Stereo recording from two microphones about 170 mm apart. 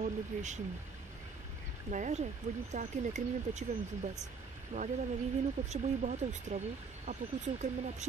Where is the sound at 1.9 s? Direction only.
45° right (ahead or behind).